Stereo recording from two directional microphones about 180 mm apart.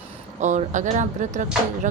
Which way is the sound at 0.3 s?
40° right (ahead or behind).